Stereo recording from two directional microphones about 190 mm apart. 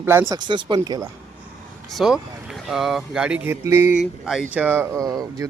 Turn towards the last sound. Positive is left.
turn(degrees=-20)  # may be behind; listen again after turning